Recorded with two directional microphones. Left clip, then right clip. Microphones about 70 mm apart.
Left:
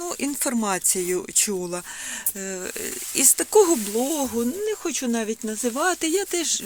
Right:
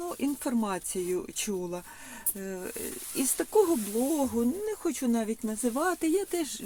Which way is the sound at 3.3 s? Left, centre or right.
Left.